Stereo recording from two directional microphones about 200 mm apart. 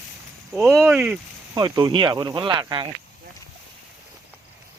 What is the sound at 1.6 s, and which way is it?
Speech, 20° right (ahead or behind).